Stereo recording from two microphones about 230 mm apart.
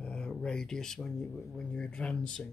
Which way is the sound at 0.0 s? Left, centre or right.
Centre.